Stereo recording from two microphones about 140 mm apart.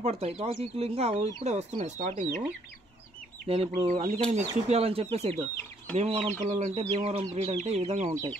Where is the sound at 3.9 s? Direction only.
60° right (ahead or behind).